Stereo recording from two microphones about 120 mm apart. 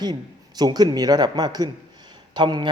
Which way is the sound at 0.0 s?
35° right (ahead or behind).